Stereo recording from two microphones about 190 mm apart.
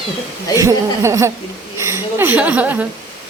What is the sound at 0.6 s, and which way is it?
A woman's voice, 15° right (ahead or behind).